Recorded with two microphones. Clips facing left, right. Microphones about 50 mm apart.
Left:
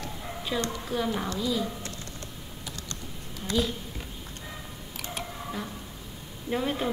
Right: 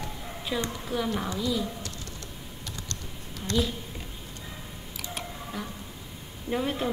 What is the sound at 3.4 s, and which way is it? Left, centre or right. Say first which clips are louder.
Speech: even; centre.